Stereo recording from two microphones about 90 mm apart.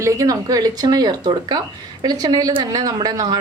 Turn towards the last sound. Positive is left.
turn(degrees=-45)  # may be behind; listen again after turning